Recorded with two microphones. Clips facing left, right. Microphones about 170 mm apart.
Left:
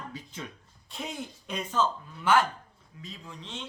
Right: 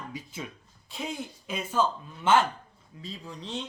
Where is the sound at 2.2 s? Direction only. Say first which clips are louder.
Right 1 dB; 25° right (ahead or behind).